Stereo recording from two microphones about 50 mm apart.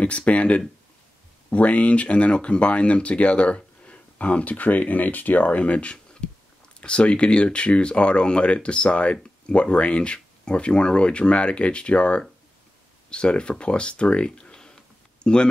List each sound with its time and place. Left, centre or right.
0.0 s speech: left